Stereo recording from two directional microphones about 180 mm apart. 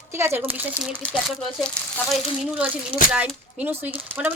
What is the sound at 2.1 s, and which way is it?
Speech, 5° right (ahead or behind).